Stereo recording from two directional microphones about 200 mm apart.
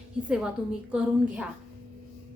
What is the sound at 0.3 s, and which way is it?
A woman's voice, 5° right (ahead or behind).